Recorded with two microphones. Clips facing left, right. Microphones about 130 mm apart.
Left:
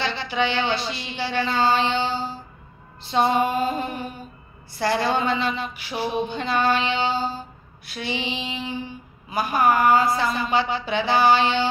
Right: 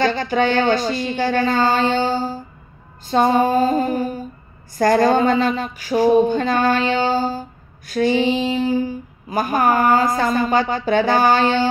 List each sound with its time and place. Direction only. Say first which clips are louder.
0.0 s speech: right 7 dB; 45° right (ahead or behind)
3.1 s mantra: right 5 dB; 40° right (ahead or behind)
4.7 s speech: right 8 dB; 45° right (ahead or behind)